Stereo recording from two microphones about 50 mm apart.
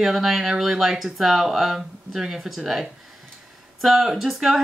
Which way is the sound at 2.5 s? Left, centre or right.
Centre.